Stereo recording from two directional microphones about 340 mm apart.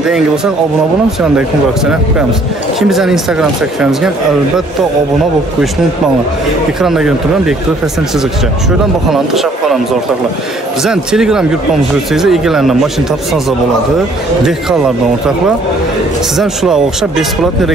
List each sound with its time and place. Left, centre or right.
2.9 s speech: centre
6.8 s speech: centre
9.1 s speech: centre
10.8 s speech: centre
16.3 s speech: centre